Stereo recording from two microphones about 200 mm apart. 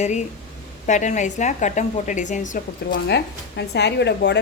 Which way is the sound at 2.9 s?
55° left (ahead or behind).